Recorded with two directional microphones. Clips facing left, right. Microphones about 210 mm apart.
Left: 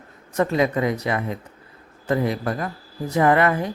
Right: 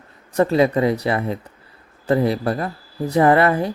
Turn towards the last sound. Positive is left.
turn(degrees=-35)  # may be behind; listen again after turning